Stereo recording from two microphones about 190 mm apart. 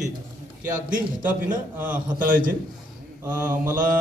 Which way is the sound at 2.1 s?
45° right (ahead or behind).